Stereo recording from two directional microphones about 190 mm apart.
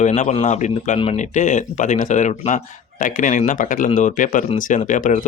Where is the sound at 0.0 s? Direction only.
40° left (ahead or behind).